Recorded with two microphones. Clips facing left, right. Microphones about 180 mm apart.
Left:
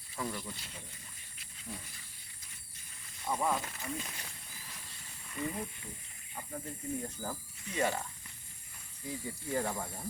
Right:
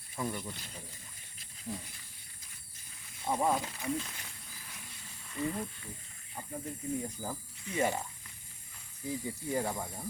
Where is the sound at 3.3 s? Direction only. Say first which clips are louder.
Right 3 dB; 25° right (ahead or behind).